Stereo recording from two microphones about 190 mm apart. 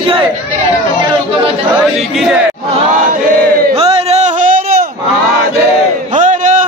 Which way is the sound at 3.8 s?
30° right (ahead or behind).